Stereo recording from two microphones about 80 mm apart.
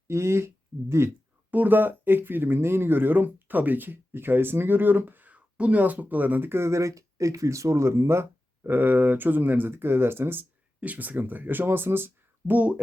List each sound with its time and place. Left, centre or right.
0.1 s speech: right
1.5 s speech: right